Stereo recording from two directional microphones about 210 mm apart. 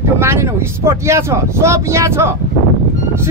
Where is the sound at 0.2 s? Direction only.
10° right (ahead or behind).